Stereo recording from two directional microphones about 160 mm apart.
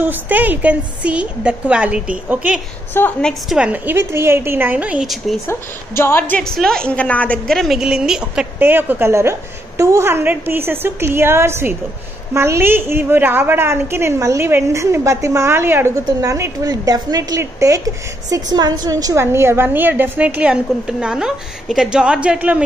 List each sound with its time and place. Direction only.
0.0 s a woman's voice: 10° right (ahead or behind)
2.9 s a woman's voice: 10° left (ahead or behind)
3.5 s a woman's voice: 10° right (ahead or behind)
5.5 s a woman's voice: 15° left (ahead or behind); by 22.6 s 10° right (ahead or behind)